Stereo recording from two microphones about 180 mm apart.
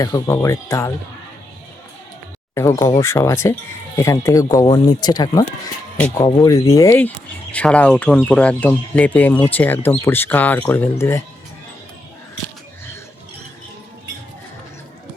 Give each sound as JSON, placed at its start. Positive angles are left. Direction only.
{"t": 0.0, "sound": "speech", "side_deg": 20}
{"t": 2.6, "sound": "speech", "side_deg": 15}